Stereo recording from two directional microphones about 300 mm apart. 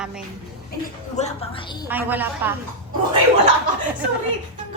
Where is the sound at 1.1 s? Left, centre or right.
Left.